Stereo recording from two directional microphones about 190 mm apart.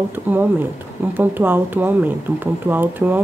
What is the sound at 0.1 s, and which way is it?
Speech, 10° right (ahead or behind).